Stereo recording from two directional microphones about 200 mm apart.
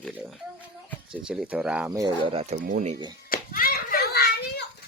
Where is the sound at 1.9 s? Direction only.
20° right (ahead or behind).